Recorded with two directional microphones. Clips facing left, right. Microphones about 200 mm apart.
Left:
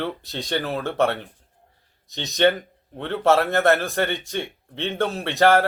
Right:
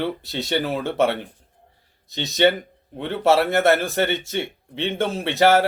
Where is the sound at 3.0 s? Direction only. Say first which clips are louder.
Right 1 dB; 15° right (ahead or behind).